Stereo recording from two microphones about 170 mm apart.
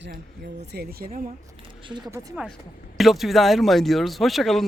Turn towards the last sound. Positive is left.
turn(degrees=0)  # may be behind; listen again after turning